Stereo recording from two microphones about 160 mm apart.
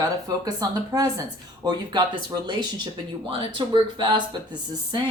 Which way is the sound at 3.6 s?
25° right (ahead or behind).